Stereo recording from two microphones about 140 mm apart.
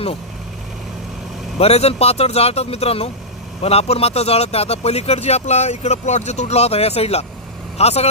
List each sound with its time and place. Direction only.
1.6 s speech: 45° left (ahead or behind)